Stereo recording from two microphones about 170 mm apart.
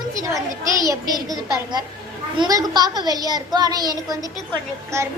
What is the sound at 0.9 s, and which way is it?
A child's voice, 20° right (ahead or behind).